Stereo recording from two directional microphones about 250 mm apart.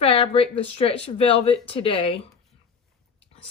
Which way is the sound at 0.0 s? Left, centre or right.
Left.